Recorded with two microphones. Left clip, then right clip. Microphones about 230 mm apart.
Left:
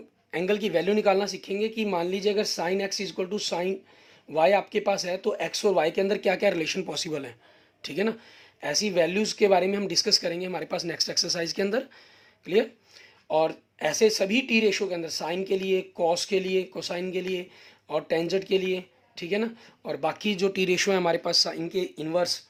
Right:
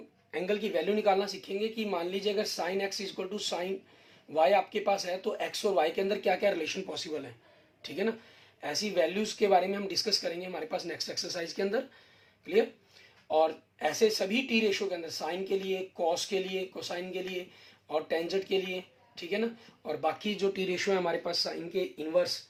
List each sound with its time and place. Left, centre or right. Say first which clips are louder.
0.3 s speech: left 5 dB; left
13.2 s speech: left 3 dB; left